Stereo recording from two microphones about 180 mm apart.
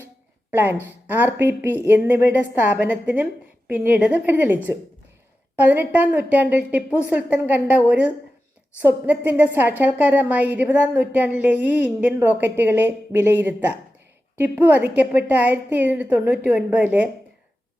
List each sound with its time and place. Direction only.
0.5 s a woman's voice: 10° right (ahead or behind)
9.0 s a woman's voice: 10° right (ahead or behind)